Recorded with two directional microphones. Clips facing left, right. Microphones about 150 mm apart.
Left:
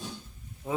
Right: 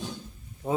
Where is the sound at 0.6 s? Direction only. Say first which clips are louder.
Right 3 dB; 45° right (ahead or behind).